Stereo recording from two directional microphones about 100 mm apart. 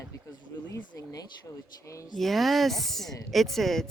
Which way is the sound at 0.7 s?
35° left (ahead or behind).